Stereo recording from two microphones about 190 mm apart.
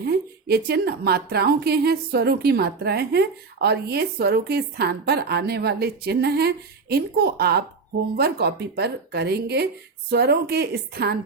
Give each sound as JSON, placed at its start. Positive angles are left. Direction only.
{"t": 0.0, "sound": "a woman's voice", "side_deg": -55}